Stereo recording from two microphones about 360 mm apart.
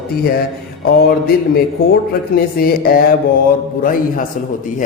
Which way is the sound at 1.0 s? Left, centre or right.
Left.